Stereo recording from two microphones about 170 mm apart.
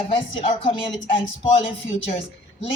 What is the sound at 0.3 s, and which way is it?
A woman's voice, 25° left (ahead or behind).